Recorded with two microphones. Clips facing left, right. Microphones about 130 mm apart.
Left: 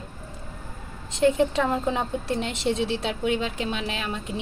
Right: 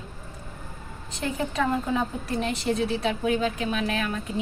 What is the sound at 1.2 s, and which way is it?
A woman's voice, 25° left (ahead or behind).